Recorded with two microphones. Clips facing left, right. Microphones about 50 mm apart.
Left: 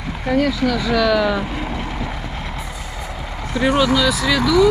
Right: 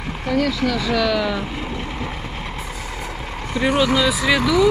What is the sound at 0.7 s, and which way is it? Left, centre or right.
Speech, centre.